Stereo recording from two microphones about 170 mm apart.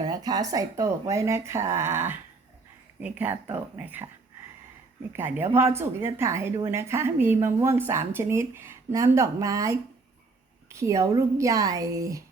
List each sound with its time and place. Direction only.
0.0 s speech: 25° right (ahead or behind)
5.1 s speech: 15° right (ahead or behind)